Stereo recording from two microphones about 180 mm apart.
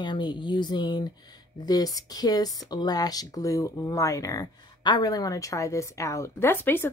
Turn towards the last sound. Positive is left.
turn(degrees=10)  # may be behind; listen again after turning